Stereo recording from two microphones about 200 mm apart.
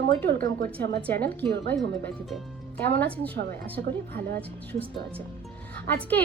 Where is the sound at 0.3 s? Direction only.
50° right (ahead or behind).